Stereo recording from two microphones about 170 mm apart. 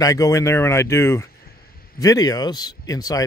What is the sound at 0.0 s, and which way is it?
A man's voice, 20° left (ahead or behind).